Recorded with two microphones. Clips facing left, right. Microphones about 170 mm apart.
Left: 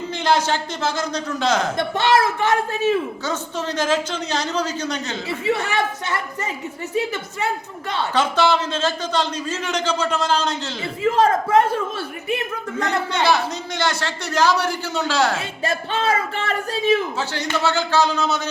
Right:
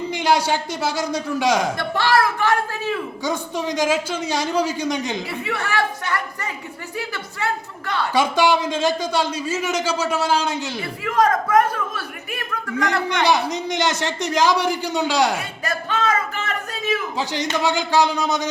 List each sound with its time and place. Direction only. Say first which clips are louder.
0.1 s a man's voice: even; 10° right (ahead or behind)
1.7 s a man's voice: left 1 dB; 20° left (ahead or behind)
3.2 s a man's voice: right 2 dB; 15° right (ahead or behind)
5.5 s a man's voice: left 3 dB; 20° left (ahead or behind)
8.1 s a man's voice: right 1 dB; 10° right (ahead or behind)
11.0 s a man's voice: left 2 dB; 25° left (ahead or behind)
13.2 s a man's voice: right 1 dB; 15° right (ahead or behind)
15.4 s a man's voice: left 3 dB; 25° left (ahead or behind)
17.2 s a man's voice: right 1 dB; 15° right (ahead or behind)